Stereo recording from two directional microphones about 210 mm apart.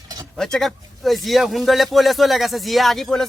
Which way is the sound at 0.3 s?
Centre (ahead or behind).